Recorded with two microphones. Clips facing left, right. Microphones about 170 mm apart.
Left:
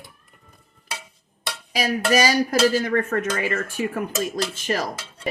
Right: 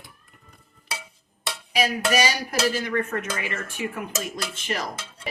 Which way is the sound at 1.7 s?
40° left (ahead or behind).